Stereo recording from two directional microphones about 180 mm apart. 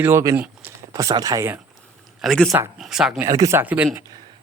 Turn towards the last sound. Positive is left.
turn(degrees=-10)  # may be behind; listen again after turning